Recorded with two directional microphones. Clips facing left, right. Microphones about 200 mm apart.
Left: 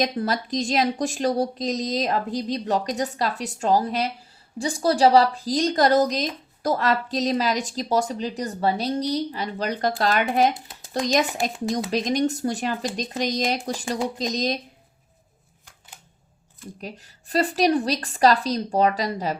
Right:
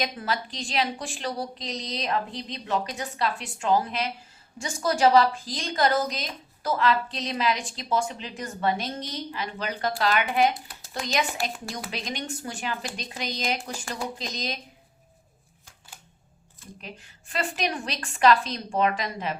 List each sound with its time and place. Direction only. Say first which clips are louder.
0.0 s a woman's voice: left 6 dB; 40° left (ahead or behind)
16.8 s a woman's voice: left 6 dB; 40° left (ahead or behind)